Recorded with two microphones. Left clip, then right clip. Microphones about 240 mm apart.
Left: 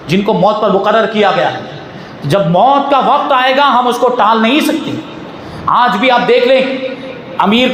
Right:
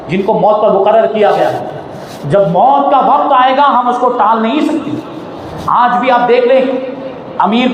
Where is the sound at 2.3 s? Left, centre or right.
Left.